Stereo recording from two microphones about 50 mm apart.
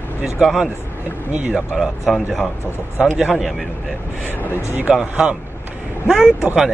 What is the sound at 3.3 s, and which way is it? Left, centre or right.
Speech, centre.